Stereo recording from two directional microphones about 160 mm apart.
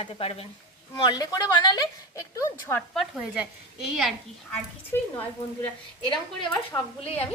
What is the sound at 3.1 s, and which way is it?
A woman's voice, 5° right (ahead or behind).